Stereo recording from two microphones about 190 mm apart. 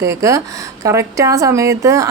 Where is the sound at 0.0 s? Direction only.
15° right (ahead or behind).